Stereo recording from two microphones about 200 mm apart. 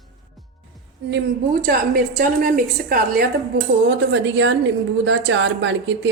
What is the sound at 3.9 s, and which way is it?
A woman's voice, 65° right (ahead or behind).